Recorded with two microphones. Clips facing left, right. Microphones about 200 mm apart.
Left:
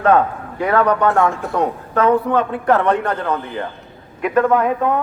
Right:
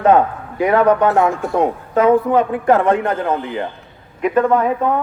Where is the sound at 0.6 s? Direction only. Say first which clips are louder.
Right 3 dB; 20° right (ahead or behind).